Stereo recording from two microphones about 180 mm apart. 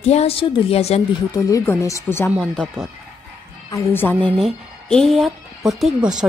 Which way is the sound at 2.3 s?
Centre (ahead or behind).